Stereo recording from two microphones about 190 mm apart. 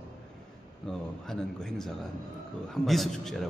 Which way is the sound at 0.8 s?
5° left (ahead or behind).